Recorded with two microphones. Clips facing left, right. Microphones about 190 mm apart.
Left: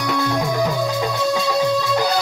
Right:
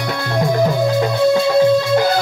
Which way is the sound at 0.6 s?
45° right (ahead or behind).